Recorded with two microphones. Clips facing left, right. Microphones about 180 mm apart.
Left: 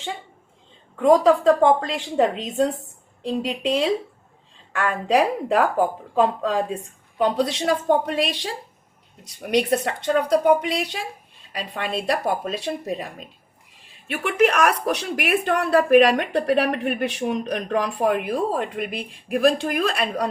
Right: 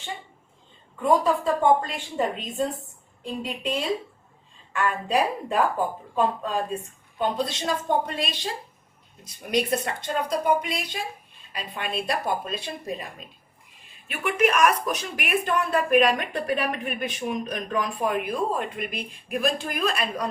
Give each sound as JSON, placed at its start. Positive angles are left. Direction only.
{"t": 0.9, "sound": "speech", "side_deg": 90}
{"t": 7.2, "sound": "speech", "side_deg": 80}